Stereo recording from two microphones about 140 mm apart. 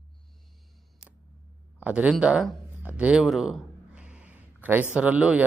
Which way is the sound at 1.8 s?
10° right (ahead or behind).